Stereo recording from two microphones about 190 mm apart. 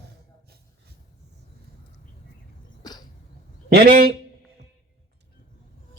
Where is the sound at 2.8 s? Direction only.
20° left (ahead or behind).